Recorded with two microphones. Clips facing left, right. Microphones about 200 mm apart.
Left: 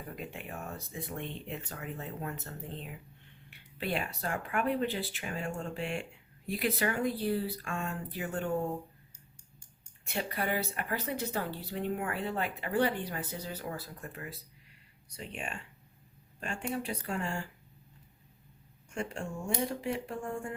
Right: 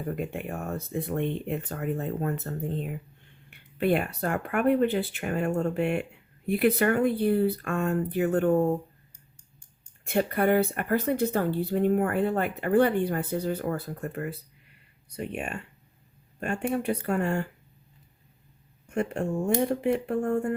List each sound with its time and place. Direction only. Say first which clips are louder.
0.2 s speech: right 9 dB; 50° right (ahead or behind)
10.1 s speech: right 10 dB; 55° right (ahead or behind)
18.9 s speech: right 9 dB; 60° right (ahead or behind)